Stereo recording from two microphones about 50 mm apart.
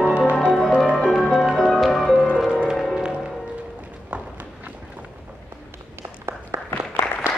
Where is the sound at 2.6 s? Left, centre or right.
Centre.